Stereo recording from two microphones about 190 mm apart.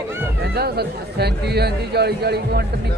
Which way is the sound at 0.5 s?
55° right (ahead or behind).